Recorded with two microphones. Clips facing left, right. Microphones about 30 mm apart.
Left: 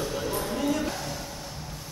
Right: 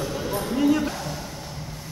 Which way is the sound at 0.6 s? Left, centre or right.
Centre.